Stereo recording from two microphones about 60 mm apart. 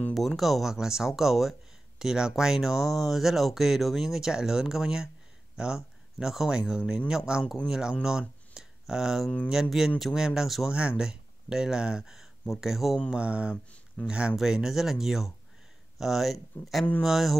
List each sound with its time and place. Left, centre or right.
0.4 s speech: centre
8.0 s a sound: centre
9.5 s speech: centre
10.7 s speech: centre
13.1 s a sound: centre
14.0 s speech: centre